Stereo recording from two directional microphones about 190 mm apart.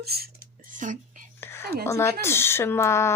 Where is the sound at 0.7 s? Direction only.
40° right (ahead or behind).